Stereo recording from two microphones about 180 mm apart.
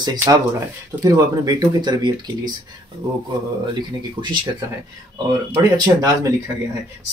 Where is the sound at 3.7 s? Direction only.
25° right (ahead or behind).